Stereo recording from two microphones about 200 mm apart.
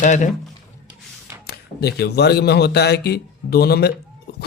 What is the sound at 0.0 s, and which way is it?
Speech, 35° left (ahead or behind).